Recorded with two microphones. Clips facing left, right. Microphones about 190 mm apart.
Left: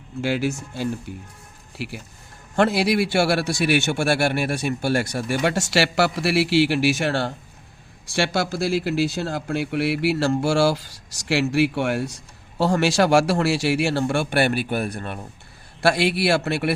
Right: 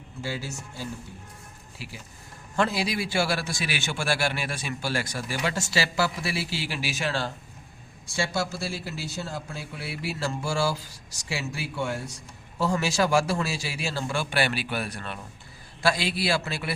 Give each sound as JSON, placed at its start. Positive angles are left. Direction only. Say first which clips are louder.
{"t": 0.2, "sound": "speech", "louder": "left 11 dB", "side_deg": 85}
{"t": 1.8, "sound": "a man's voice", "louder": "left 10 dB", "side_deg": 70}
{"t": 8.1, "sound": "a man's voice", "louder": "left 6 dB", "side_deg": 90}
{"t": 12.5, "sound": "a man's voice", "louder": "left 6 dB", "side_deg": 80}
{"t": 15.8, "sound": "a man's voice", "louder": "left 6 dB", "side_deg": 65}